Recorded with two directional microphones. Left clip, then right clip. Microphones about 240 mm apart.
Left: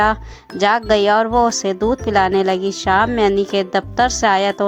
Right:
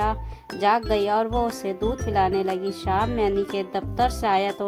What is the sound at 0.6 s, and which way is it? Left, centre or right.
Speech, centre.